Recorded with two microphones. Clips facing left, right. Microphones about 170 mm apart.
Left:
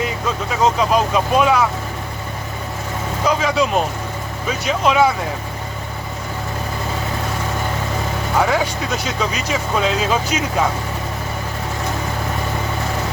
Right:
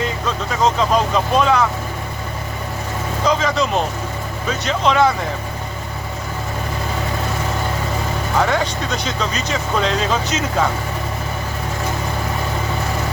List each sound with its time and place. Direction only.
0.0 s vehicle: 5° left (ahead or behind)
3.2 s speech: 10° left (ahead or behind)
8.4 s speech: 5° left (ahead or behind)